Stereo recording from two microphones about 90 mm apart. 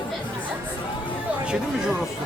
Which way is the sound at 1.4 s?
10° right (ahead or behind).